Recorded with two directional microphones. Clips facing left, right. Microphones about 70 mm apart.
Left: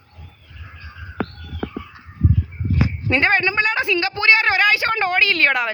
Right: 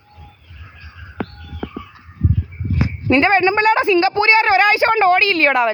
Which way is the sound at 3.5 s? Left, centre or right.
Right.